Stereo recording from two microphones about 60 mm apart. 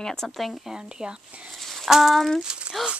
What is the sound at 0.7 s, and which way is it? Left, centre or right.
Speech, centre.